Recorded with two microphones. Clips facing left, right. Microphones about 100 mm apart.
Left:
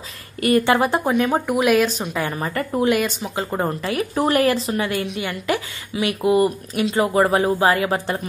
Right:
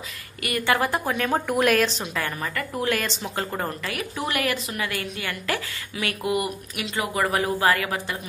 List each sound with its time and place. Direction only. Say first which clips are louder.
0.4 s a woman's voice: left 7 dB; 30° left (ahead or behind); by 1.9 s 5° left (ahead or behind)
2.3 s a woman's voice: left 6 dB; 30° left (ahead or behind)
3.2 s speech: left 3 dB; 15° left (ahead or behind)
3.5 s a woman's voice: left 7 dB; 25° left (ahead or behind)